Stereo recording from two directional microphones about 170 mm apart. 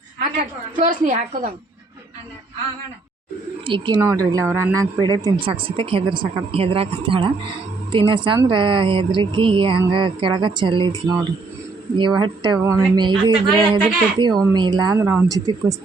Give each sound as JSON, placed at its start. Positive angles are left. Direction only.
{"t": 0.2, "sound": "a woman's voice", "side_deg": -50}
{"t": 3.7, "sound": "a woman's voice", "side_deg": -25}
{"t": 11.9, "sound": "speech", "side_deg": -25}